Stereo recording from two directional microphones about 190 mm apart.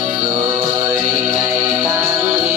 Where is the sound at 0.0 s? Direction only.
10° right (ahead or behind).